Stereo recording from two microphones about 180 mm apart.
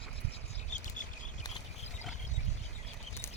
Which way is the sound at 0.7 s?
45° left (ahead or behind).